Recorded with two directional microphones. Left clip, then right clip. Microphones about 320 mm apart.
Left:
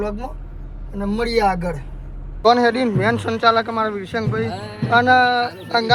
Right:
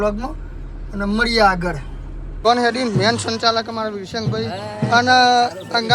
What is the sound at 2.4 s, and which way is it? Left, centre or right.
Speech, centre.